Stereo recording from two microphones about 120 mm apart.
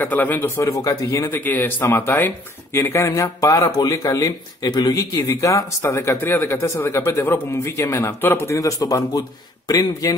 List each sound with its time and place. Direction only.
0.0 s a man's voice: 15° left (ahead or behind)
0.6 s speech: 30° left (ahead or behind)
1.3 s speech: 15° left (ahead or behind); by 10.1 s 35° left (ahead or behind)